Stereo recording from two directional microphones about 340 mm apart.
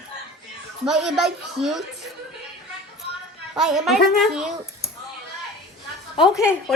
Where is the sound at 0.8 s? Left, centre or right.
Centre.